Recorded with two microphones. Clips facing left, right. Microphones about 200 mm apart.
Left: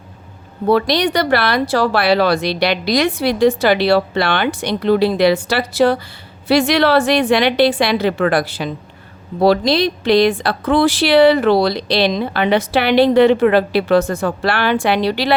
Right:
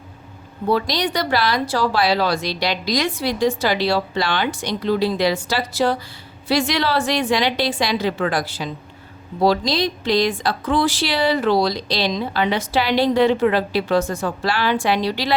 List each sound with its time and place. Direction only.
0.7 s speech: 65° left (ahead or behind)